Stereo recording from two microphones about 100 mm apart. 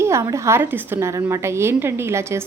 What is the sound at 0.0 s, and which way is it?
A woman's voice, 30° right (ahead or behind).